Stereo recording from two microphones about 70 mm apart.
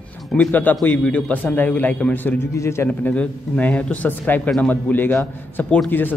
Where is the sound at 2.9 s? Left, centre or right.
Left.